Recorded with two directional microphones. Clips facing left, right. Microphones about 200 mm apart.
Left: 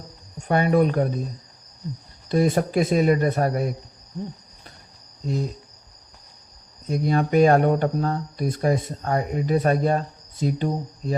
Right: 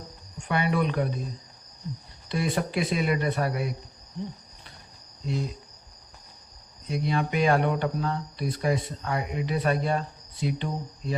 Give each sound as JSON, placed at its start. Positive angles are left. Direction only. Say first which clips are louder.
{"t": 0.4, "sound": "speech", "louder": "left 7 dB", "side_deg": 45}
{"t": 2.3, "sound": "speech", "louder": "left 7 dB", "side_deg": 45}
{"t": 5.2, "sound": "cricket", "louder": "left 4 dB", "side_deg": 45}
{"t": 6.8, "sound": "speech", "louder": "left 5 dB", "side_deg": 45}